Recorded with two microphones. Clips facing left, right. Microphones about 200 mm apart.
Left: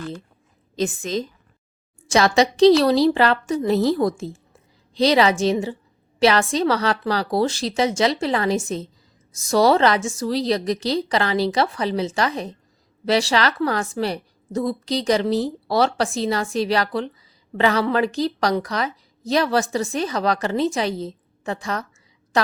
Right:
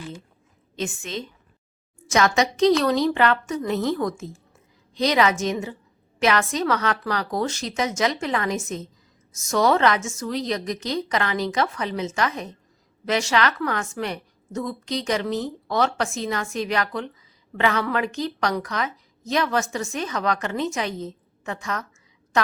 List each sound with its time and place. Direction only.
0.8 s a woman's voice: 35° left (ahead or behind)